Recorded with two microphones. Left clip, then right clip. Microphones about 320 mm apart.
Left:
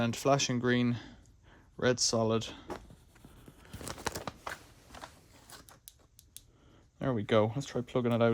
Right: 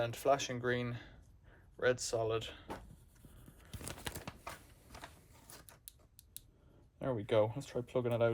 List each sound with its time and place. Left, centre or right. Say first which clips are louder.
0.0 s speech: left 4 dB; left
3.8 s tearing: left 8 dB; centre
4.3 s a sound: left 7 dB; centre
7.0 s speech: left 4 dB; left